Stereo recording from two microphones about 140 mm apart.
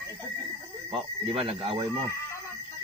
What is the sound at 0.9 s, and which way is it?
Speech, 45° right (ahead or behind).